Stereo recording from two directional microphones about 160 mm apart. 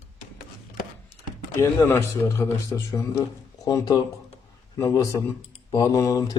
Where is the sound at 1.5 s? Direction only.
15° left (ahead or behind).